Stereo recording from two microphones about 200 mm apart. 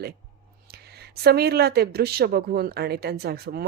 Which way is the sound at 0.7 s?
55° right (ahead or behind).